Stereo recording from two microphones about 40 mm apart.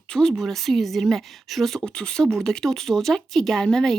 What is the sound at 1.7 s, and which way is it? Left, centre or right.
Speech, left.